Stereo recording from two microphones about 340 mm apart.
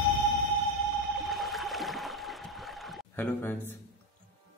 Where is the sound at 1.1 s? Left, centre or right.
Centre.